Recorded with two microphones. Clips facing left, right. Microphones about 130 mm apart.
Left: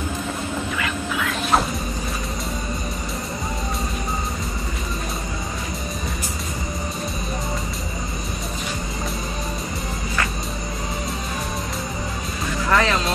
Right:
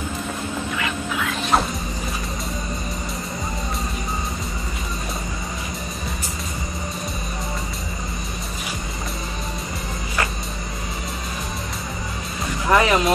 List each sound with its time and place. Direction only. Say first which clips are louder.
0.7 s music: even; centre (ahead or behind)
12.6 s music: right 3 dB; 15° right (ahead or behind)